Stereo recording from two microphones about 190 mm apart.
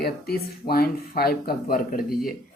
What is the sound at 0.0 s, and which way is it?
A woman's voice, 55° left (ahead or behind).